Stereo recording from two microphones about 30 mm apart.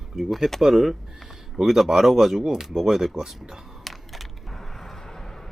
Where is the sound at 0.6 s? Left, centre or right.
Centre.